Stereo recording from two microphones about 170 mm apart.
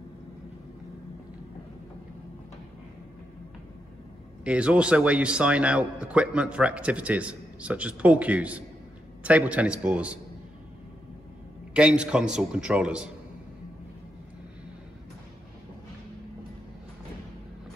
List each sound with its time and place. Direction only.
4.5 s speech: 5° right (ahead or behind)
11.7 s a man's voice: 5° right (ahead or behind)